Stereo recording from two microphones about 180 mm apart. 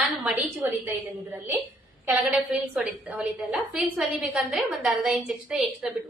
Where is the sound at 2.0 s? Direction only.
10° right (ahead or behind).